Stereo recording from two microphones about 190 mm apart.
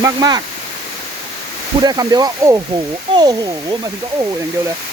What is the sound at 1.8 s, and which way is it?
Speech, 20° right (ahead or behind).